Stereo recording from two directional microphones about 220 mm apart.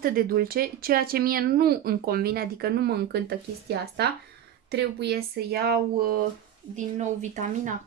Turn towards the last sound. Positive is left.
turn(degrees=-35)  # may be behind; listen again after turning